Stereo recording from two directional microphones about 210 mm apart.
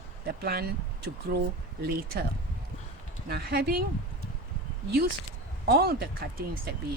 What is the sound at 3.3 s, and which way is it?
Speech, 50° right (ahead or behind).